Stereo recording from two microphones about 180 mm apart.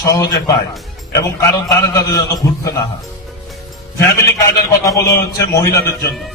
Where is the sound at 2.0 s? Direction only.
20° left (ahead or behind).